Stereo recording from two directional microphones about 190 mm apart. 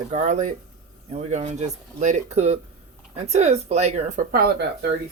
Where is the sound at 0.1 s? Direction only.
40° right (ahead or behind); by 4.9 s 55° right (ahead or behind).